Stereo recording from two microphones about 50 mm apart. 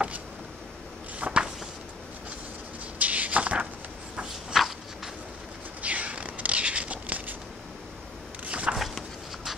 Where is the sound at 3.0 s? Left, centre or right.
Right.